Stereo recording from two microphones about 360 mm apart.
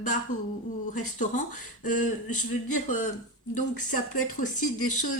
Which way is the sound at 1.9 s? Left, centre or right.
Left.